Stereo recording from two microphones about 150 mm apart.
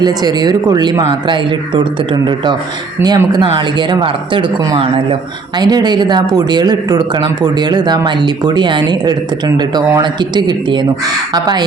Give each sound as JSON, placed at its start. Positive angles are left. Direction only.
{"t": 0.0, "sound": "speech", "side_deg": -25}